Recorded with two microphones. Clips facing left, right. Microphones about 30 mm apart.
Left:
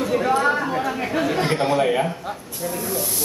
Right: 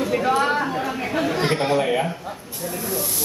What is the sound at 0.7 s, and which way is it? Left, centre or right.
Chatter, centre.